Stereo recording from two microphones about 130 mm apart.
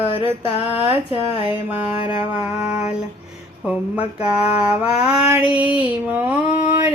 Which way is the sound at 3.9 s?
10° right (ahead or behind).